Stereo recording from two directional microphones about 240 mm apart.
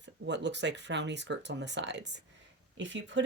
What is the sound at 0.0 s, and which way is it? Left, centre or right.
Speech, right.